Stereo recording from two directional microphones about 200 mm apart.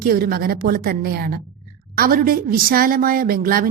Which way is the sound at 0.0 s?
50° right (ahead or behind).